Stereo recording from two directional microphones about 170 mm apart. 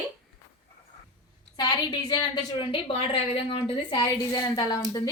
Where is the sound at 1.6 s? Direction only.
25° left (ahead or behind).